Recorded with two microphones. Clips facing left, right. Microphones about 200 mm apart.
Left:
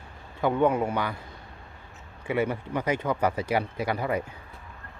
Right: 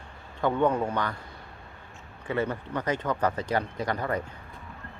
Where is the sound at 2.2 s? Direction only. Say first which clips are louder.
Left 2 dB; 10° left (ahead or behind).